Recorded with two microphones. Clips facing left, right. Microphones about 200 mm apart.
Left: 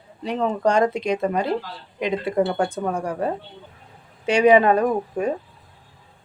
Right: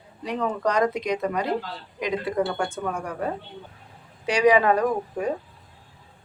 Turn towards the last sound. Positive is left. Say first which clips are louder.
# left 3 dB
turn(degrees=25)  # may be behind; listen again after turning